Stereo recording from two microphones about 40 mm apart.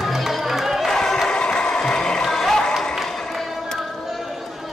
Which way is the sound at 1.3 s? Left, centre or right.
Left.